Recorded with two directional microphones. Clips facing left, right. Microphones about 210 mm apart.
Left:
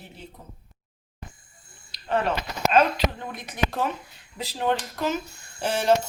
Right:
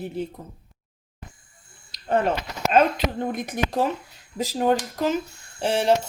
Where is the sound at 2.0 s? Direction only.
45° right (ahead or behind).